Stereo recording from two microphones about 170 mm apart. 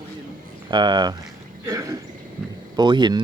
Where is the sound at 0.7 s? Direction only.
25° right (ahead or behind).